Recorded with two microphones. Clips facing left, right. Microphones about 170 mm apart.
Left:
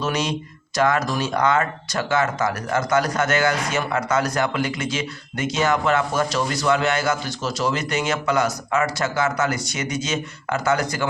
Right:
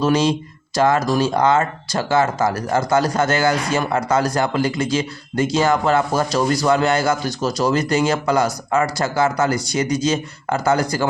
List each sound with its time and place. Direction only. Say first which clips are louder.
0.0 s speech: right 7 dB; 30° right (ahead or behind)